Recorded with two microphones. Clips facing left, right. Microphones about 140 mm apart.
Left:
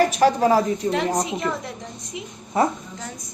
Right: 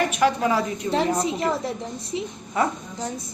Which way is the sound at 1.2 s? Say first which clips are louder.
Right 2 dB; 35° right (ahead or behind).